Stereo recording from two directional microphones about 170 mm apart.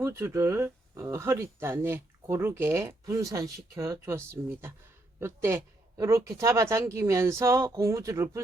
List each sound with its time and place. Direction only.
0.0 s speech: 15° right (ahead or behind)